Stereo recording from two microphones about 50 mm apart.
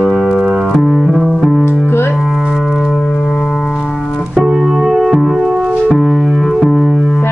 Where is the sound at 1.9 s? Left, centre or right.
Left.